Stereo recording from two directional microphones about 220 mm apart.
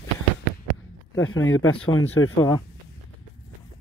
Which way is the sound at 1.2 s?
65° left (ahead or behind).